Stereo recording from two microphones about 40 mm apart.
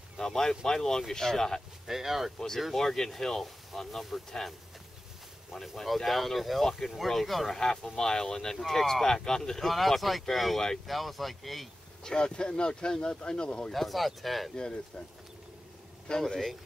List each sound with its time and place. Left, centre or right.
0.2 s speech: centre
1.9 s speech: centre
2.6 s speech: centre
7.6 s speech: centre
12.0 s speech: centre
13.7 s speech: centre
14.5 s speech: left
16.1 s speech: centre